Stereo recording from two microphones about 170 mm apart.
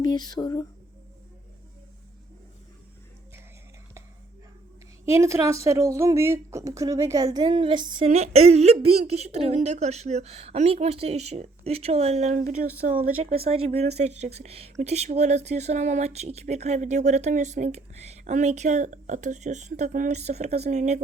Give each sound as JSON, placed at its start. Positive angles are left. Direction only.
{"t": 0.0, "sound": "speech", "side_deg": 25}
{"t": 5.1, "sound": "a woman's voice", "side_deg": -15}
{"t": 8.1, "sound": "speech", "side_deg": -40}
{"t": 13.3, "sound": "speech", "side_deg": -35}